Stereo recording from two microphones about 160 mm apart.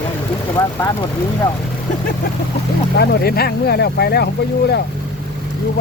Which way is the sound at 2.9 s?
80° left.